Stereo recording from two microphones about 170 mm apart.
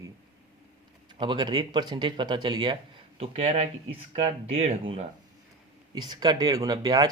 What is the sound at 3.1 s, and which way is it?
Speech, 35° right (ahead or behind).